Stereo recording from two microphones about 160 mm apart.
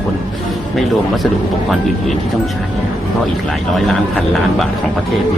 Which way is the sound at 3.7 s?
Centre (ahead or behind).